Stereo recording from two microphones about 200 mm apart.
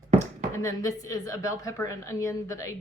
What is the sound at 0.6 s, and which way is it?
A woman's voice, 15° left (ahead or behind).